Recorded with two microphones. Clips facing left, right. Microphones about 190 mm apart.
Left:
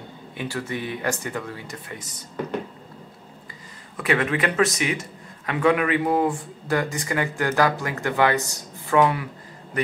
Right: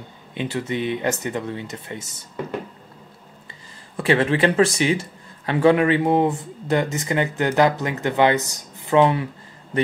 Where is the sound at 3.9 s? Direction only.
30° right (ahead or behind).